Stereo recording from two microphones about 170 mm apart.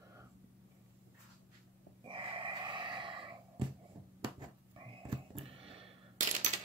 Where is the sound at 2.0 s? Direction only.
30° right (ahead or behind).